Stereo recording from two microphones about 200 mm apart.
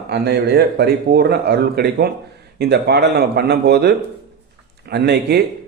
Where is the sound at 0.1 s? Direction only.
55° right (ahead or behind).